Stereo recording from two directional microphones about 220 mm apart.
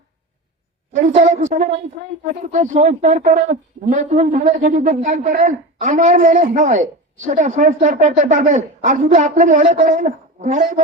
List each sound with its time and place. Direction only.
0.9 s speech: 35° right (ahead or behind)